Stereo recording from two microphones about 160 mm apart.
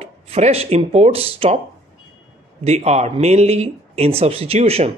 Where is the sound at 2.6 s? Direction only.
40° right (ahead or behind).